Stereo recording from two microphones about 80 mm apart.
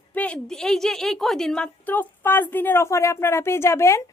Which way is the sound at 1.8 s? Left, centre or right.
Left.